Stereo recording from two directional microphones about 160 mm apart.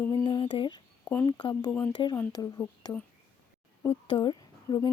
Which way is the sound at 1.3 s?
30° left (ahead or behind).